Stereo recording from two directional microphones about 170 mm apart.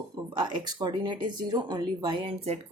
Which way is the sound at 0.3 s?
25° right (ahead or behind).